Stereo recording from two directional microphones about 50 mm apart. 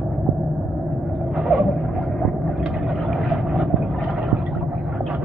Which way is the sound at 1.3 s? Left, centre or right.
Centre.